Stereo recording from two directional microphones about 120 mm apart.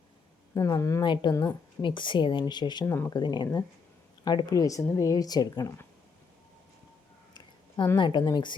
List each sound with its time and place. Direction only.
0.5 s speech: 25° left (ahead or behind)
1.0 s speech: 40° left (ahead or behind)
2.8 s speech: 20° left (ahead or behind)
3.1 s speech: 35° left (ahead or behind)
7.9 s speech: 40° left (ahead or behind)